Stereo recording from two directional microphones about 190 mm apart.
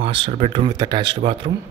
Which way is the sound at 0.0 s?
30° right (ahead or behind).